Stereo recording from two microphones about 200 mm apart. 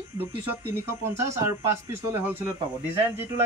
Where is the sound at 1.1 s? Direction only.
15° right (ahead or behind).